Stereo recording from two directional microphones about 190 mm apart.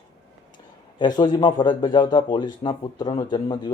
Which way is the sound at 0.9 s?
20° left (ahead or behind).